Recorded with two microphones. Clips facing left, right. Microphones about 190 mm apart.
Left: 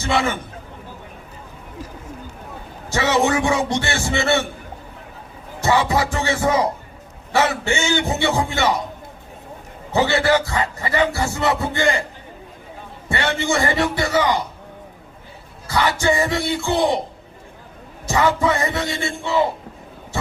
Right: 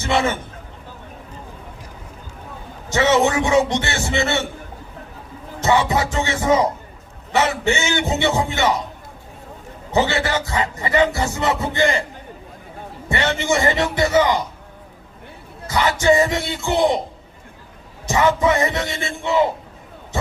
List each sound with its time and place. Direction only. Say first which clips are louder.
0.0 s a man's voice: right 1 dB; 20° right (ahead or behind)
2.9 s speech: right 2 dB; 20° right (ahead or behind)
5.5 s speech: even; 20° right (ahead or behind)
9.9 s speech: left 2 dB; 20° right (ahead or behind)
13.1 s speech: right 1 dB; 20° right (ahead or behind)
15.6 s speech: right 2 dB; 20° right (ahead or behind)
18.0 s speech: right 1 dB; 20° right (ahead or behind)